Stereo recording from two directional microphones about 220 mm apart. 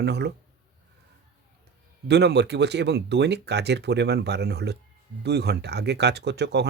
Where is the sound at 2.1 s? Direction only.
50° right (ahead or behind).